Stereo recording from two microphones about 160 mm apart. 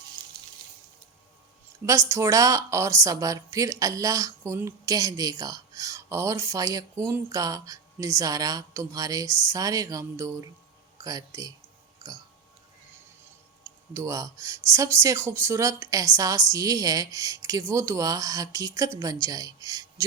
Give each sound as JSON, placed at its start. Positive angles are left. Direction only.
{"t": 0.2, "sound": "water", "side_deg": -30}
{"t": 1.9, "sound": "speech", "side_deg": -20}
{"t": 13.7, "sound": "speech", "side_deg": -20}